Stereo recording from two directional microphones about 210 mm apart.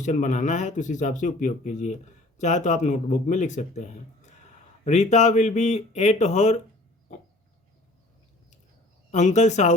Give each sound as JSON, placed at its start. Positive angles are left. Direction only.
{"t": 0.0, "sound": "speech", "side_deg": 35}
{"t": 4.9, "sound": "speech", "side_deg": 30}
{"t": 9.1, "sound": "speech", "side_deg": 35}